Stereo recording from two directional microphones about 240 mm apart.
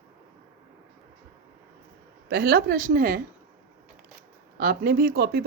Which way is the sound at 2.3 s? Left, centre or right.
Right.